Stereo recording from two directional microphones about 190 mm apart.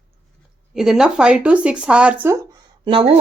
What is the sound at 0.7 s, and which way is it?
A woman's voice, centre (ahead or behind).